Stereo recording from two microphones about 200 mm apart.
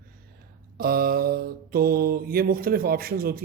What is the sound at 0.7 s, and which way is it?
A man's voice, 50° right (ahead or behind).